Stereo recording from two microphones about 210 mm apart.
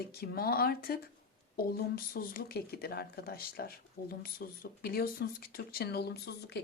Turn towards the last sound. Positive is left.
turn(degrees=50)  # may be behind; listen again after turning